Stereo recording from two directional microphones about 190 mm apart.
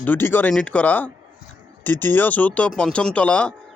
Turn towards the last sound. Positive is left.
turn(degrees=5)  # may be behind; listen again after turning